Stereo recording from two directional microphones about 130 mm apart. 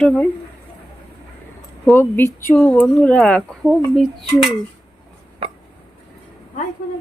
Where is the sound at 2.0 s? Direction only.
15° left (ahead or behind).